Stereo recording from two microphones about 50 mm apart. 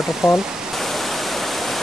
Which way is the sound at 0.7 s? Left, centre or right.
Centre.